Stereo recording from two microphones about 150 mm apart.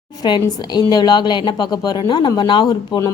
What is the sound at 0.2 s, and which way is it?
A woman's voice, 30° left (ahead or behind).